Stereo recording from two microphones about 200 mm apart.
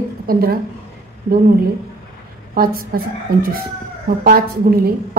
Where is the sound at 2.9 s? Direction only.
50° right (ahead or behind).